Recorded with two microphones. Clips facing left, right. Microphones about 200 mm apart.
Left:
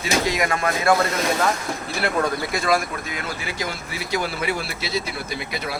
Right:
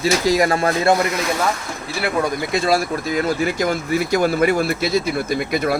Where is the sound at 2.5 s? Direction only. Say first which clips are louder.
Right 6 dB; 30° right (ahead or behind); by 5.8 s 50° right (ahead or behind).